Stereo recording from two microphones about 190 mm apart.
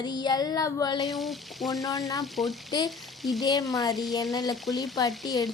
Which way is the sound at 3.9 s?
Centre (ahead or behind).